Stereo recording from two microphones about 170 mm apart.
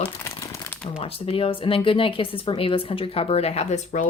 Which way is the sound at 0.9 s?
35° left (ahead or behind).